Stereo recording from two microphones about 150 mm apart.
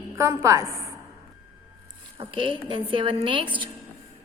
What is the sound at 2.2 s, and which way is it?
A woman's voice, 35° right (ahead or behind).